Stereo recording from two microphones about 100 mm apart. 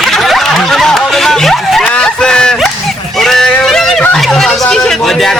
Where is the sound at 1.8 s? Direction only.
10° left (ahead or behind).